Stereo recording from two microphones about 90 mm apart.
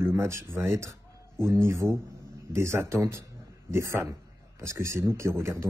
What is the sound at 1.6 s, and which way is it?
A man's voice, 30° right (ahead or behind).